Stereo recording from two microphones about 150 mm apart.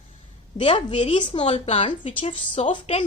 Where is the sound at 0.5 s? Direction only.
35° left (ahead or behind).